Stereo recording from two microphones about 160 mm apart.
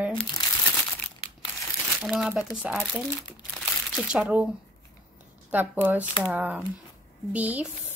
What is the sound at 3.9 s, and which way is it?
Speech, 5° right (ahead or behind).